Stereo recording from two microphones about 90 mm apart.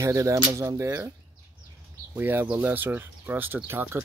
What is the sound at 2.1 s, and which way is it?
Speech, 20° right (ahead or behind).